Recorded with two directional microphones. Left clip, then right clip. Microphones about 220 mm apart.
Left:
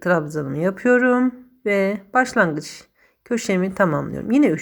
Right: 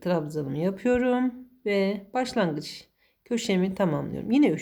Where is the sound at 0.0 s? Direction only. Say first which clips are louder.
Left 8 dB; 15° left (ahead or behind).